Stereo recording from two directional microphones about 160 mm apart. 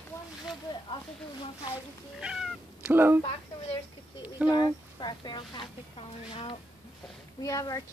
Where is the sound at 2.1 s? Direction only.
5° right (ahead or behind).